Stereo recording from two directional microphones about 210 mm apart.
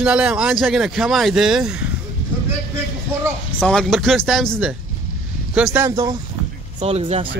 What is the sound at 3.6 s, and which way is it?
Speech, 5° left (ahead or behind).